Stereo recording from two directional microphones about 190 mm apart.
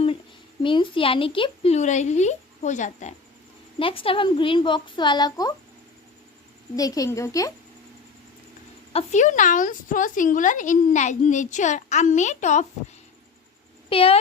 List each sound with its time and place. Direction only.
0.6 s a woman's voice: 25° left (ahead or behind)
3.8 s a woman's voice: 30° left (ahead or behind)
6.7 s speech: 20° left (ahead or behind)
8.9 s a woman's voice: 35° left (ahead or behind)
13.9 s a woman's voice: 30° left (ahead or behind)